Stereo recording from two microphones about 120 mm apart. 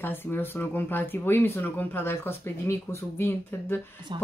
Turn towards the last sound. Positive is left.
turn(degrees=20)  # may be behind; listen again after turning